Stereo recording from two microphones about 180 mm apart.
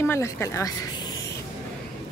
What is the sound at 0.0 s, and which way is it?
A woman's voice, 15° left (ahead or behind).